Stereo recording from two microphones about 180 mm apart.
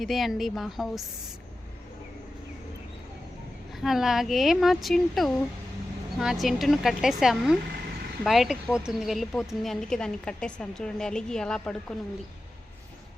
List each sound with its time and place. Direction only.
0.0 s a woman's voice: centre (ahead or behind)
3.7 s a woman's voice: centre (ahead or behind)